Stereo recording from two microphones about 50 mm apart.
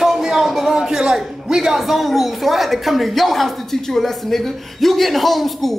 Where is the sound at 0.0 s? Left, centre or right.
Centre.